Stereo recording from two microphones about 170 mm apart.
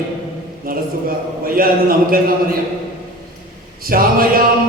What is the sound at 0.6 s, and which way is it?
A man's voice, 60° right (ahead or behind).